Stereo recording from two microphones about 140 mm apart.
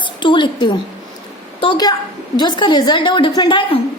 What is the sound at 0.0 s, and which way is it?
A woman's voice, 35° left (ahead or behind).